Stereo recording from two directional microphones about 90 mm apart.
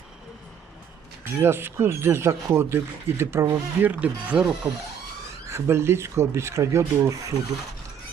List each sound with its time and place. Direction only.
1.2 s speech: 25° right (ahead or behind)
5.5 s speech: 30° right (ahead or behind)